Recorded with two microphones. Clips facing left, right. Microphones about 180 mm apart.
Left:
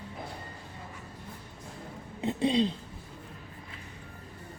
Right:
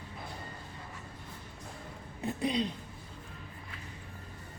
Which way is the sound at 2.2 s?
25° left (ahead or behind).